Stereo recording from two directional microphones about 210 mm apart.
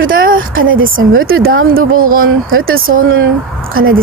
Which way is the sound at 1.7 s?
45° right (ahead or behind).